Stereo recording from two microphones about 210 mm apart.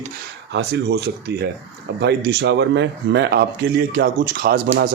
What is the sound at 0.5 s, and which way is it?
Speech, 55° right (ahead or behind).